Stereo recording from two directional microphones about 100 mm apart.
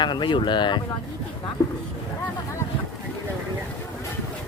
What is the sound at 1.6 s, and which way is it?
Speech, 35° left (ahead or behind).